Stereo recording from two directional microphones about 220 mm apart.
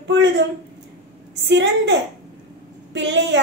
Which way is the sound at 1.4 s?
55° right (ahead or behind).